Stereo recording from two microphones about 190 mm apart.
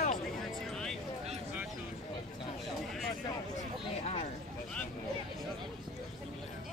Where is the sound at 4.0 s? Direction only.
35° left (ahead or behind).